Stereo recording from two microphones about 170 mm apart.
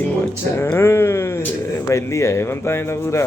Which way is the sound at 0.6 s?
15° left (ahead or behind).